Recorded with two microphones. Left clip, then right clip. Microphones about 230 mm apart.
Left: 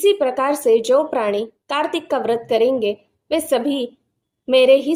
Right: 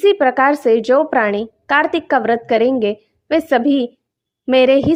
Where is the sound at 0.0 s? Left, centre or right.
Right.